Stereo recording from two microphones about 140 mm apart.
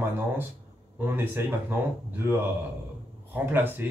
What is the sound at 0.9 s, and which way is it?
Speech, 15° right (ahead or behind).